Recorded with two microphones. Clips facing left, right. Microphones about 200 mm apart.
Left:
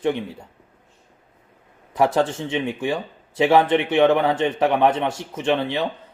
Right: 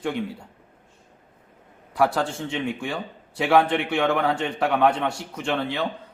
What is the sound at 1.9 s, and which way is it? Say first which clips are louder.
Speech: left 3 dB; 20° left (ahead or behind).